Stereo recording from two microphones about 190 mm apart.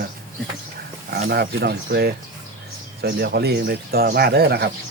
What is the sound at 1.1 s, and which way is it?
Speech, 60° right (ahead or behind).